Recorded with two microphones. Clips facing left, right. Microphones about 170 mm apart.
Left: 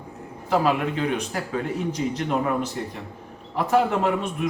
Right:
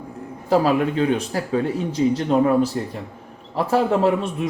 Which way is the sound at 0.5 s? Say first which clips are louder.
Right 4 dB; 35° right (ahead or behind).